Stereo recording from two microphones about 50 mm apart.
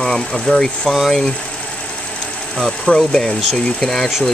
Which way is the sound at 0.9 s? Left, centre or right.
Centre.